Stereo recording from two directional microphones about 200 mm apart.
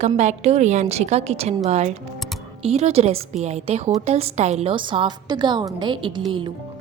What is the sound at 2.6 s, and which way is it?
A woman's voice, 30° right (ahead or behind).